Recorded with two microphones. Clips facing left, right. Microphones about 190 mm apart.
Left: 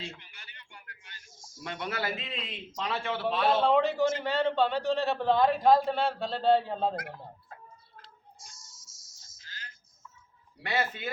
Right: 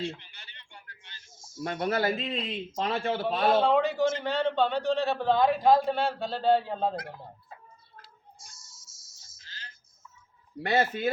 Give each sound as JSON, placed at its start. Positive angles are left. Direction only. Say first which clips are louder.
{"t": 0.1, "sound": "a sound", "louder": "right 6 dB", "side_deg": -30}
{"t": 1.6, "sound": "a man's voice", "louder": "right 7 dB", "side_deg": -45}
{"t": 3.5, "sound": "a man's voice", "louder": "right 1 dB", "side_deg": 0}
{"t": 8.0, "sound": "music", "louder": "even", "side_deg": -5}
{"t": 9.5, "sound": "a sound", "louder": "left 1 dB", "side_deg": -30}
{"t": 10.6, "sound": "speech", "louder": "right 6 dB", "side_deg": -45}